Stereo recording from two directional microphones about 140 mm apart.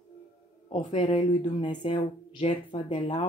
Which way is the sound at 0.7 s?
40° left (ahead or behind).